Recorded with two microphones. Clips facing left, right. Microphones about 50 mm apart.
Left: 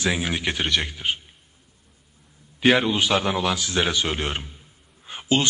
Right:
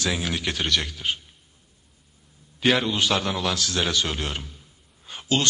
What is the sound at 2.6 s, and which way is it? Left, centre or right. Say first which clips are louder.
A man's voice: left 3 dB; left.